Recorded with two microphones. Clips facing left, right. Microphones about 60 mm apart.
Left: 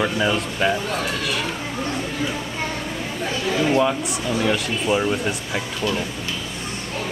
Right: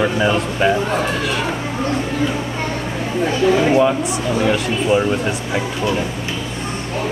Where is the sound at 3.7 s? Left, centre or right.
Centre.